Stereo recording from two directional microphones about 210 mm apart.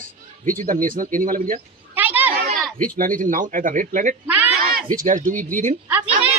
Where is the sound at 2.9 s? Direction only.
40° right (ahead or behind).